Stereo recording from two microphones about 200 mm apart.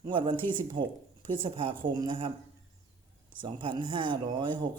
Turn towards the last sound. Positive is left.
turn(degrees=-25)  # may be behind; listen again after turning